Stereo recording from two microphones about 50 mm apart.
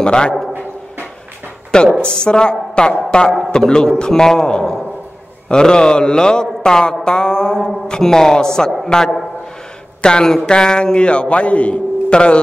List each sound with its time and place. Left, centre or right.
0.0 s a man's voice: centre
1.7 s a woman's voice: centre